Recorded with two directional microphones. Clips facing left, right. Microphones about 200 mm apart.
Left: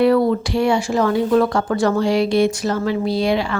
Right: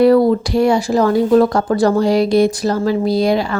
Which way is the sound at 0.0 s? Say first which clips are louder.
Right 4 dB; 35° right (ahead or behind).